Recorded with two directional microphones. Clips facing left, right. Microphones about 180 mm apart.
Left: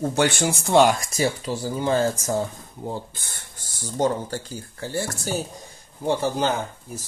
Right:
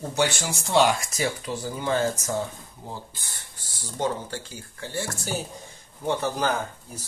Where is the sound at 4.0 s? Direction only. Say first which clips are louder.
Left 5 dB; 40° left (ahead or behind).